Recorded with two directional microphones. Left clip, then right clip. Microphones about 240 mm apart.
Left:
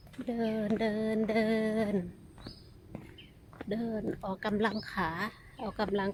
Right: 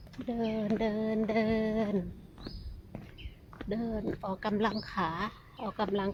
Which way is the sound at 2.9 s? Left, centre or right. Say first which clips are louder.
Even; centre.